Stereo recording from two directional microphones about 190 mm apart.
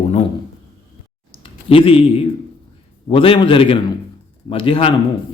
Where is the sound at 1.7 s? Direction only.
30° left (ahead or behind).